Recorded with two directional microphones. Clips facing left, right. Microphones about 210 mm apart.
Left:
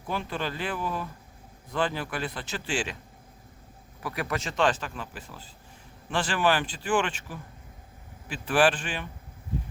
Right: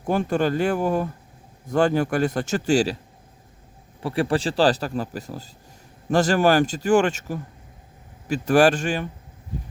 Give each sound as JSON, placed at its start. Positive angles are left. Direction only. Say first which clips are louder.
{"t": 0.0, "sound": "a man's voice", "louder": "right 10 dB", "side_deg": -45}
{"t": 4.0, "sound": "a man's voice", "louder": "right 9 dB", "side_deg": -30}